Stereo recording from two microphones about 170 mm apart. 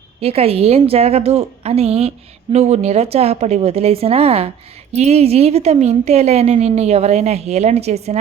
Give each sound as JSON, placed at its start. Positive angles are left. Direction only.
{"t": 0.2, "sound": "a woman's voice", "side_deg": -35}